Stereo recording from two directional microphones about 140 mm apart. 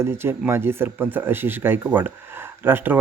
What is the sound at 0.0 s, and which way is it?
Speech, 15° right (ahead or behind).